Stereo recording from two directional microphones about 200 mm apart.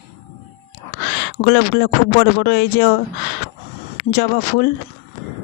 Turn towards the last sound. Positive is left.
turn(degrees=55)  # may be behind; listen again after turning